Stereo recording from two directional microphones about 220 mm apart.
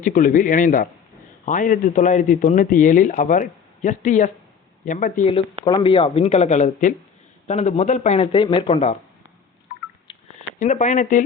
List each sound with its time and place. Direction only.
0.0 s a man's voice: 35° left (ahead or behind)
5.3 s speech: 20° left (ahead or behind)
10.1 s telephone dialing: 25° left (ahead or behind)
10.6 s a man's voice: 35° left (ahead or behind)